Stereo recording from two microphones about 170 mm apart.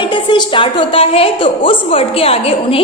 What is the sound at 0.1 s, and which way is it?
A woman's voice, 30° left (ahead or behind).